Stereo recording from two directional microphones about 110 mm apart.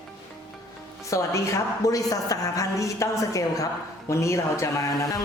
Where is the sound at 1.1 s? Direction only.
30° left (ahead or behind).